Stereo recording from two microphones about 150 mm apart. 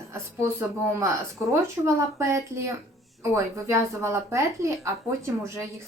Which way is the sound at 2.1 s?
20° right (ahead or behind).